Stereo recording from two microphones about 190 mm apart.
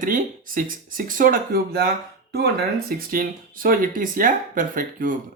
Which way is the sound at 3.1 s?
50° right (ahead or behind).